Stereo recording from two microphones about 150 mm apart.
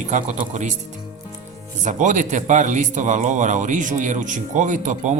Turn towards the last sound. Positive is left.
turn(degrees=-55)  # may be behind; listen again after turning